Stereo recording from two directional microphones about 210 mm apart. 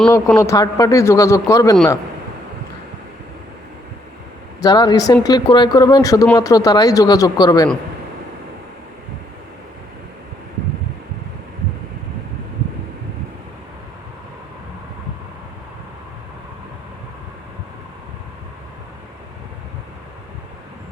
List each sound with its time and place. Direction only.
0.1 s a man's voice: 15° left (ahead or behind)
4.6 s a man's voice: 20° left (ahead or behind)